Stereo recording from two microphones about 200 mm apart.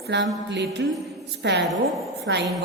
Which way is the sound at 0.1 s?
60° right (ahead or behind).